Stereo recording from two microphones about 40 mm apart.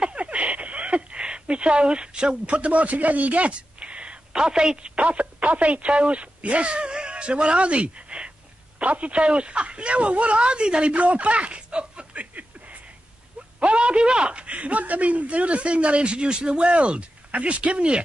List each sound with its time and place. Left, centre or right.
0.0 s a sound: right
4.3 s a woman's voice: centre
4.9 s speech: right
13.6 s a man's voice: right